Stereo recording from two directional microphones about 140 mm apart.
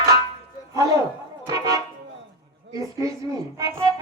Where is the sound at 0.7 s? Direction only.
25° right (ahead or behind).